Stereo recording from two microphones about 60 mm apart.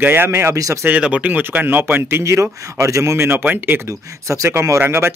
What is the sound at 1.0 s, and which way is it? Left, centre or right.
Speech, right.